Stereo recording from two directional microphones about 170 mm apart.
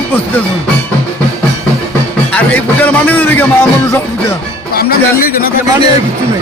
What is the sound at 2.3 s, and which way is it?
Speech, 10° left (ahead or behind).